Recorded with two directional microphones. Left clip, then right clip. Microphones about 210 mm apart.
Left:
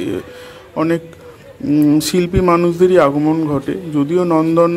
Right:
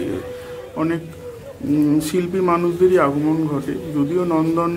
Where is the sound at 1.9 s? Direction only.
50° left (ahead or behind).